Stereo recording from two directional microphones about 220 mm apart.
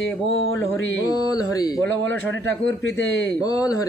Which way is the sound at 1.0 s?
15° left (ahead or behind).